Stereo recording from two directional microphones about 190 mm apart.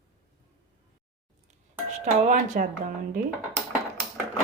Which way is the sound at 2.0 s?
40° right (ahead or behind).